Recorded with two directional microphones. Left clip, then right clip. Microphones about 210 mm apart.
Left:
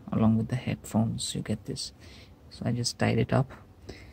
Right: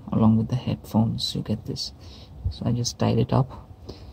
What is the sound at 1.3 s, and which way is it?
Speech, 5° left (ahead or behind).